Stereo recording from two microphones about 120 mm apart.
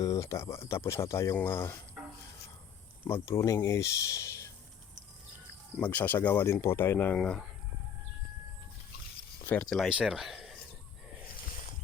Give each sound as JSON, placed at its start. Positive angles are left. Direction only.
{"t": 0.0, "sound": "speech", "side_deg": 25}
{"t": 3.0, "sound": "speech", "side_deg": 20}
{"t": 5.8, "sound": "speech", "side_deg": 15}
{"t": 7.2, "sound": "speech", "side_deg": 5}
{"t": 9.6, "sound": "speech", "side_deg": 0}